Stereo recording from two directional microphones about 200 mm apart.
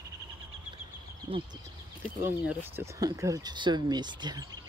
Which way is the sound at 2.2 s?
10° right (ahead or behind).